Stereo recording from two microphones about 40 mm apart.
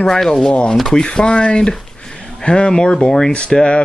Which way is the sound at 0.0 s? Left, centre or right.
Centre.